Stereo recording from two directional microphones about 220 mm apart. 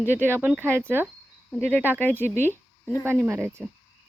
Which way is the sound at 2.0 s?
10° left (ahead or behind).